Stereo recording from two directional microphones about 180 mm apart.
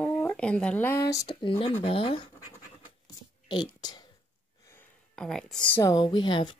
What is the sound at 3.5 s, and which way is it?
Speech, 25° left (ahead or behind).